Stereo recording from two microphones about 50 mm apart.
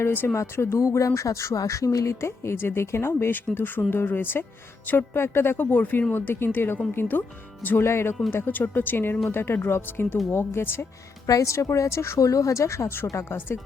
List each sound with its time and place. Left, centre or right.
0.0 s speech: left
0.3 s speech: left
3.1 s speech: left
6.1 s speech: left
7.8 s a woman's voice: left
8.3 s a woman's voice: left
11.4 s speech: left
13.1 s speech: left